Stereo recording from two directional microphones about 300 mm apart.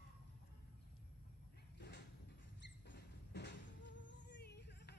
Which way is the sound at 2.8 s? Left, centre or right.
Left.